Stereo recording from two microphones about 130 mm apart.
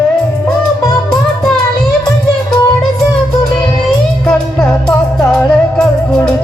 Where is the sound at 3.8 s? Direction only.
5° left (ahead or behind).